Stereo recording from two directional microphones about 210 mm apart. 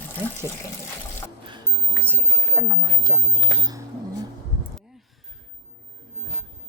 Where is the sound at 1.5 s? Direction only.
15° right (ahead or behind).